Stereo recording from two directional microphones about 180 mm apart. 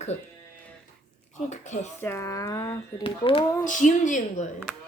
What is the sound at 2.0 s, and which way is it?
Speech, 15° left (ahead or behind).